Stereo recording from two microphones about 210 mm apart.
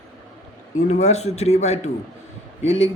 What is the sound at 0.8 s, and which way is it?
Speech, 30° left (ahead or behind).